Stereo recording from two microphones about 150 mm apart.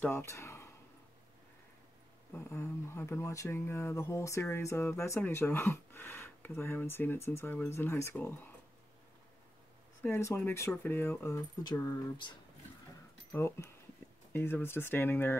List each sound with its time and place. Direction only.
0.0 s speech: 15° left (ahead or behind)
2.3 s speech: 20° left (ahead or behind)
10.0 s speech: 15° left (ahead or behind)
14.3 s speech: 15° left (ahead or behind)